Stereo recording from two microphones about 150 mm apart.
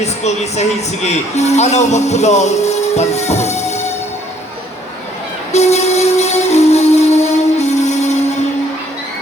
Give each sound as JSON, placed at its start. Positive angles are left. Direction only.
{"t": 0.0, "sound": "a man's voice", "side_deg": 50}
{"t": 5.5, "sound": "music", "side_deg": 45}